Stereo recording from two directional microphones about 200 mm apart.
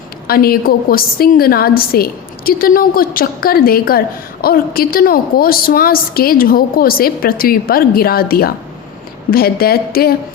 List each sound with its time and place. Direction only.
0.3 s a woman's voice: 50° left (ahead or behind)